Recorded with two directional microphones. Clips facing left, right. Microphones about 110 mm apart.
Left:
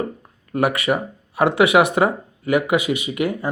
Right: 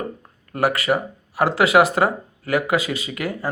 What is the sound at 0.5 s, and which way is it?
Speech, 20° left (ahead or behind).